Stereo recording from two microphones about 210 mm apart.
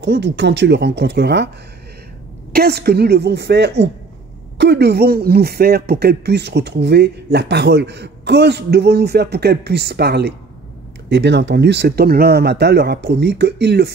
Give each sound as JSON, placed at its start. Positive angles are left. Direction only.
{"t": 0.0, "sound": "speech", "side_deg": -55}
{"t": 2.5, "sound": "speech", "side_deg": -50}